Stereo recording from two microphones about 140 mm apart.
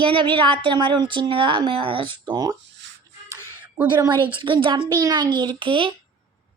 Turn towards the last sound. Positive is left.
turn(degrees=-35)  # may be behind; listen again after turning